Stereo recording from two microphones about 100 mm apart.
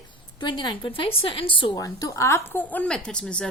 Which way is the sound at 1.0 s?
65° left (ahead or behind).